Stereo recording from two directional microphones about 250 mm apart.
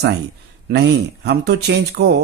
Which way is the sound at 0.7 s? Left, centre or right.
Right.